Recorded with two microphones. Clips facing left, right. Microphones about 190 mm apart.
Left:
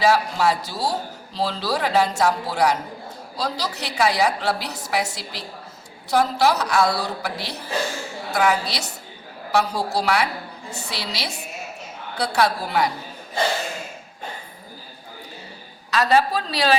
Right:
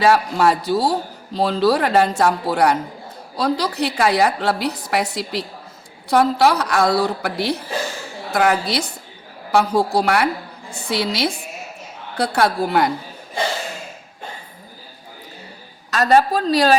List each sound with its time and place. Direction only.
0.0 s a man's voice: 55° right (ahead or behind)
15.9 s a woman's voice: 45° right (ahead or behind)